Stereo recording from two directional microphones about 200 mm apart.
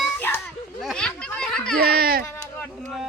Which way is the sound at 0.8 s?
5° left (ahead or behind).